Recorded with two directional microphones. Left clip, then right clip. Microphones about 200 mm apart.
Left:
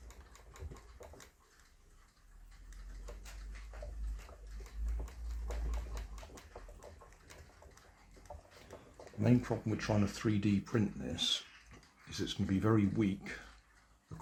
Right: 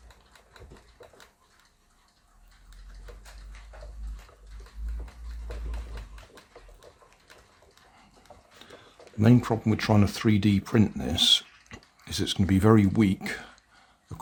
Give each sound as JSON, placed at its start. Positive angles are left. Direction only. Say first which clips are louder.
{"t": 9.2, "sound": "speech", "louder": "right 10 dB", "side_deg": -45}